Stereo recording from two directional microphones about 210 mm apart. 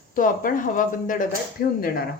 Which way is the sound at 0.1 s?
40° left (ahead or behind).